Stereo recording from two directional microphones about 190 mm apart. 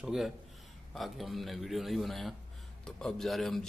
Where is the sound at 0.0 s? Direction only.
Centre (ahead or behind).